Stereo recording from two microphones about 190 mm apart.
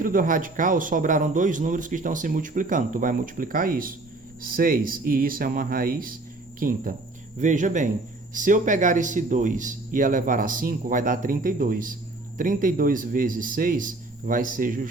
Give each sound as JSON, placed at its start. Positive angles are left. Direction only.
{"t": 0.0, "sound": "a man's voice", "side_deg": -45}